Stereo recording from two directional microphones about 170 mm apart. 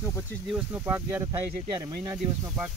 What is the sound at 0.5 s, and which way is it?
Speech, 15° right (ahead or behind).